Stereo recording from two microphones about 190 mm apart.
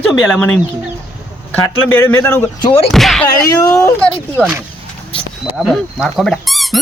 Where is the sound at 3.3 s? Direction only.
20° left (ahead or behind).